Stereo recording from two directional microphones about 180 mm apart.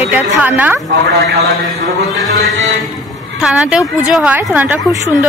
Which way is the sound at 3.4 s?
5° right (ahead or behind).